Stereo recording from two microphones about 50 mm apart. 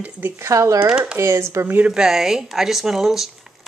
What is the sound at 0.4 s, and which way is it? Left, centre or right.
Speech, right.